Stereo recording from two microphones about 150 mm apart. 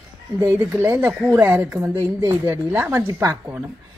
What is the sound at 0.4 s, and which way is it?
A woman's voice, 15° right (ahead or behind).